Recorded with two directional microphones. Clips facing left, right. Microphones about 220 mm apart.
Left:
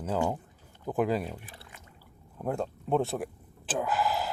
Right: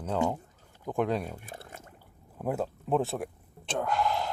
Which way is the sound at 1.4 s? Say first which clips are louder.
Right 6 dB; 45° right (ahead or behind).